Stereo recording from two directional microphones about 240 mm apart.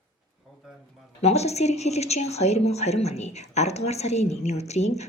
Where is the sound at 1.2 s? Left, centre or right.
Left.